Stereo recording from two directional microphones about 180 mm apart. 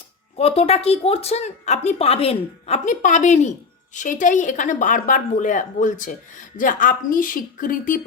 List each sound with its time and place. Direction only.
0.3 s a woman's voice: 35° left (ahead or behind); by 8.0 s 50° left (ahead or behind)